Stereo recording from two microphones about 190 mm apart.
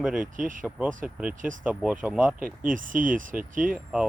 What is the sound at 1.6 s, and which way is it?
Speech, 5° right (ahead or behind).